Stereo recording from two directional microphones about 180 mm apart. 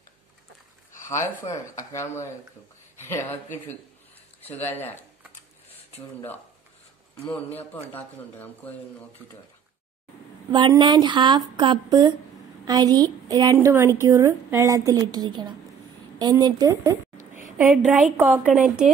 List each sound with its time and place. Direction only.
1.0 s a sound: 15° left (ahead or behind)
1.4 s speech: 15° left (ahead or behind)
4.4 s speech: 10° left (ahead or behind)
7.5 s speech: 10° left (ahead or behind)
10.5 s speech: 25° right (ahead or behind)
16.2 s a sound: 20° right (ahead or behind)
17.6 s a woman's voice: centre (ahead or behind)